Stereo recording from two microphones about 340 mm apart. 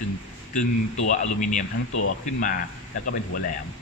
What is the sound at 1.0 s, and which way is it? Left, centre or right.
Speech, left.